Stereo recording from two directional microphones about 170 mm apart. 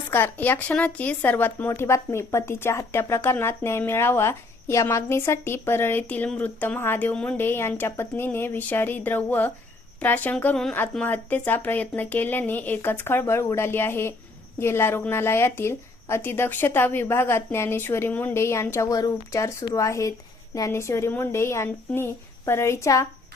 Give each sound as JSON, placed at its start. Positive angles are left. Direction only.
{"t": 0.1, "sound": "speech", "side_deg": 10}